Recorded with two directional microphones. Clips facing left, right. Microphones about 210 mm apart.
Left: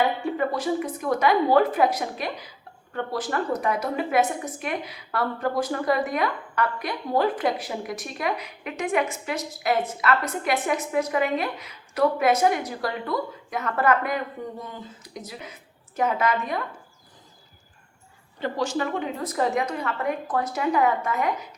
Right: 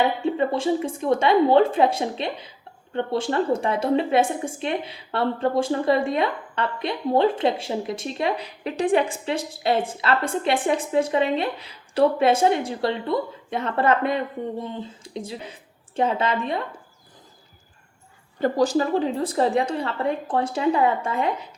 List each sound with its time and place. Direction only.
0.2 s a woman's voice: 25° right (ahead or behind)
18.3 s a woman's voice: 40° right (ahead or behind)